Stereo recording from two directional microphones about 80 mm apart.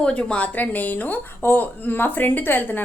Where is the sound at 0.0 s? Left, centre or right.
Centre.